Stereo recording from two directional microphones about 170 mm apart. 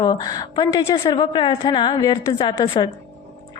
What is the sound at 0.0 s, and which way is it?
A woman's voice, 25° left (ahead or behind).